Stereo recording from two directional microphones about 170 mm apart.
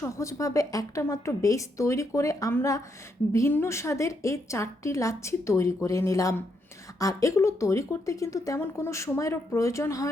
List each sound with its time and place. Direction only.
0.0 s a woman's voice: 15° left (ahead or behind)